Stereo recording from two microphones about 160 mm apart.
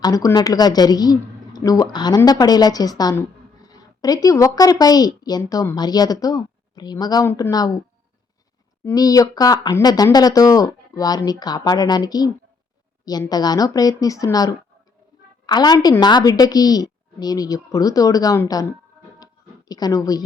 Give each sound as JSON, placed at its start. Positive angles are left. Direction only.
{"t": 0.0, "sound": "a woman's voice", "side_deg": 20}
{"t": 8.8, "sound": "speech", "side_deg": 20}
{"t": 19.2, "sound": "a sound", "side_deg": 25}